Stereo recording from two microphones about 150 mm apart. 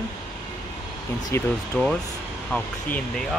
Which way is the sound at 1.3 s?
5° left (ahead or behind).